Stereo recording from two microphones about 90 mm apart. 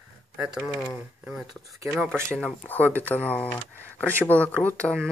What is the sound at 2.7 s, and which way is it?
Speech, 20° left (ahead or behind).